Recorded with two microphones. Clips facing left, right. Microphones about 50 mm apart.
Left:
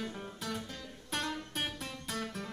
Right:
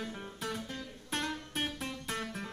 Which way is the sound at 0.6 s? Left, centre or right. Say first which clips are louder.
Right 3 dB; right.